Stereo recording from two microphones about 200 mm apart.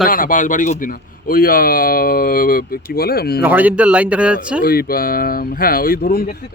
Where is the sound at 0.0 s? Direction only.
45° left (ahead or behind).